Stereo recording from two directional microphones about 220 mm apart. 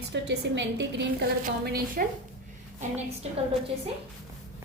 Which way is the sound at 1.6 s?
40° right (ahead or behind).